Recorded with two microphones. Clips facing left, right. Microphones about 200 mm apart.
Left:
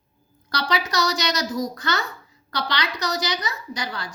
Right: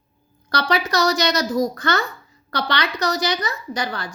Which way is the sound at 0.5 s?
55° right (ahead or behind).